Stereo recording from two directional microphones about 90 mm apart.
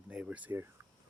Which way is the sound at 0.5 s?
30° right (ahead or behind).